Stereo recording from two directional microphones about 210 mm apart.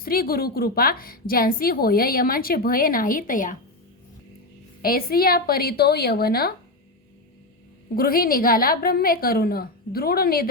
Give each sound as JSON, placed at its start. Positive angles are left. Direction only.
{"t": 0.0, "sound": "a woman's voice", "side_deg": 45}
{"t": 4.8, "sound": "a woman's voice", "side_deg": 45}
{"t": 7.9, "sound": "a woman's voice", "side_deg": 45}